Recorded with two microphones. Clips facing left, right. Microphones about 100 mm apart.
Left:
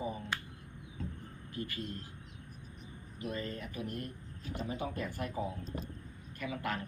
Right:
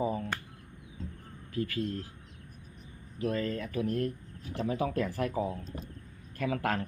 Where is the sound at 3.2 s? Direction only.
90° right.